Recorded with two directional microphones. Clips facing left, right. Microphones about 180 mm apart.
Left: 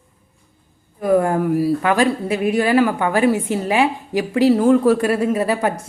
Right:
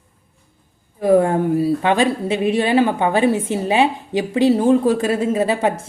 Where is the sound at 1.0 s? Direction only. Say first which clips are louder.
Right 2 dB; 30° right (ahead or behind).